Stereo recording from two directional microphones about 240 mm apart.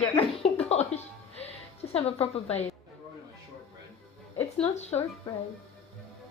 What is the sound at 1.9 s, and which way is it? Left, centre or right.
Speech, left.